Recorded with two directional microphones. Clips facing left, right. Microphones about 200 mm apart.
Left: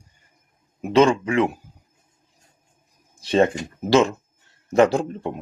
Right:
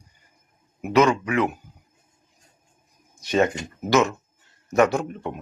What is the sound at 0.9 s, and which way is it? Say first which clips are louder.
Speech: left 2 dB; 30° left (ahead or behind).